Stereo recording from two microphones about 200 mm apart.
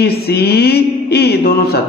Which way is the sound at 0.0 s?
55° left (ahead or behind).